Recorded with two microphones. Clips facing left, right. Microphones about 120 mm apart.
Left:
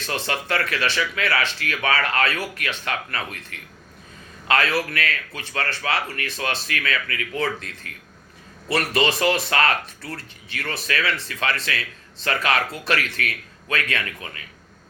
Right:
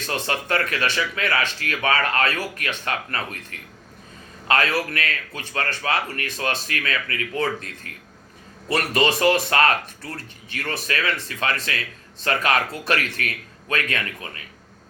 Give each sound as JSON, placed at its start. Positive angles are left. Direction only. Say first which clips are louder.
{"t": 0.3, "sound": "speech", "louder": "right 1 dB", "side_deg": -35}
{"t": 0.6, "sound": "speech", "louder": "even", "side_deg": -45}
{"t": 4.4, "sound": "a man's voice", "louder": "even", "side_deg": -40}
{"t": 14.0, "sound": "speech", "louder": "even", "side_deg": -30}